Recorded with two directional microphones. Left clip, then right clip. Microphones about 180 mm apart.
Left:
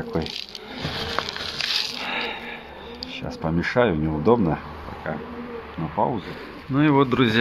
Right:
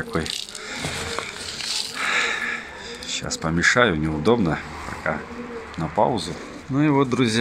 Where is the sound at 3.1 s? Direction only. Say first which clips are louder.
Right 2 dB; 5° right (ahead or behind).